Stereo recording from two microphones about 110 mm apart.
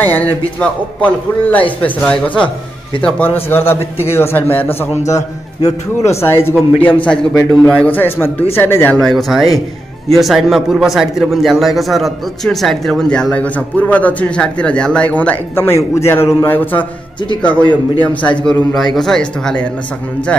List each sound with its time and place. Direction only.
0.0 s a man's voice: 15° left (ahead or behind)
5.0 s a man's voice: 30° left (ahead or behind)
8.9 s speech: centre (ahead or behind); by 16.8 s 20° left (ahead or behind)
17.6 s a man's voice: 45° left (ahead or behind)
18.4 s speech: 5° left (ahead or behind)